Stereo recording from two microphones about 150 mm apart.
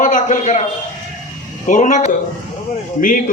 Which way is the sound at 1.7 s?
55° left (ahead or behind).